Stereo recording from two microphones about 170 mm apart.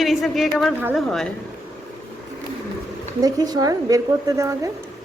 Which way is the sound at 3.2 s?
20° right (ahead or behind).